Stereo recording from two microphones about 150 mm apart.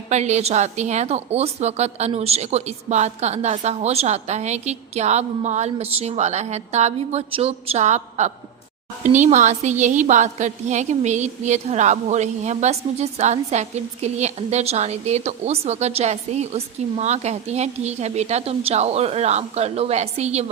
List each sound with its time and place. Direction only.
0.1 s a woman's voice: 50° right (ahead or behind)